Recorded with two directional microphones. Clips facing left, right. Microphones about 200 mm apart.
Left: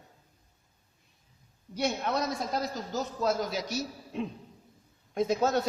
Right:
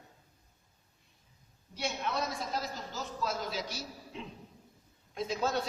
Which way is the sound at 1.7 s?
45° left (ahead or behind).